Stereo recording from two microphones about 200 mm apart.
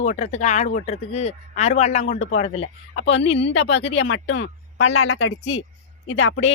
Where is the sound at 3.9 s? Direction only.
65° left (ahead or behind); by 5.6 s 90° left.